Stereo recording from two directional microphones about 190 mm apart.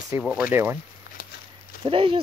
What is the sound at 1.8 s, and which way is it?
Speech, 30° right (ahead or behind).